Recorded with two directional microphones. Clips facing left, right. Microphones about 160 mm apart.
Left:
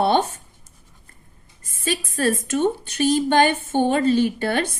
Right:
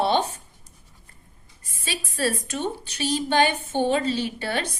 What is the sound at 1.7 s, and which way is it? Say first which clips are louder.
Speech: left 8 dB; 50° left (ahead or behind).